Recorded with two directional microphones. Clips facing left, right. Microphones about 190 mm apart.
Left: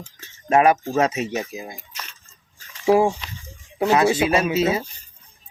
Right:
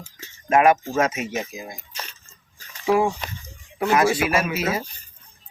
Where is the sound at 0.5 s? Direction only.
30° left (ahead or behind).